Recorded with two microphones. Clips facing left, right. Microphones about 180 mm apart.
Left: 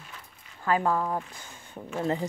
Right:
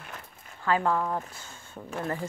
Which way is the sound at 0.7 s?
15° left (ahead or behind).